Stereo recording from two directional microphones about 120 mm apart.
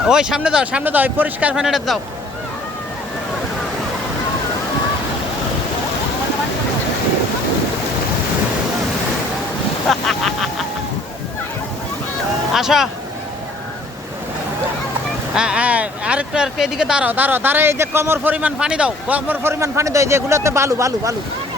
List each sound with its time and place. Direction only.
0.0 s speech: 5° right (ahead or behind)
9.9 s speech: centre (ahead or behind)
12.5 s speech: 5° right (ahead or behind)
15.4 s speech: 10° right (ahead or behind); by 21.2 s 25° right (ahead or behind)